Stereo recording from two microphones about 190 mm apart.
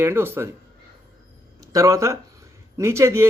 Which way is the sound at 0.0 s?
10° right (ahead or behind).